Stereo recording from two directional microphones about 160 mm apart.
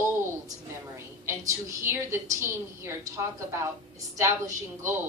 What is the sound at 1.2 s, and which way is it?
Speech, 15° right (ahead or behind).